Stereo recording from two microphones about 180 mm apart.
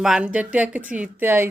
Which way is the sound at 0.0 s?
5° right (ahead or behind).